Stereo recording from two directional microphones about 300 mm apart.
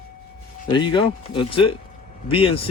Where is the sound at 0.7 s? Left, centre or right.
Centre.